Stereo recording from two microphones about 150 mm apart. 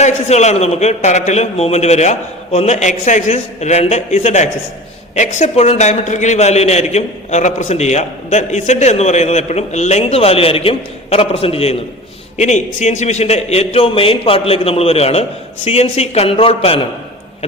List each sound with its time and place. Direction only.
0.0 s a man's voice: 50° left (ahead or behind)